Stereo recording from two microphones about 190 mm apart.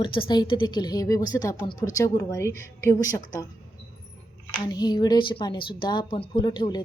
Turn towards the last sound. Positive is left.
turn(degrees=25)  # may be behind; listen again after turning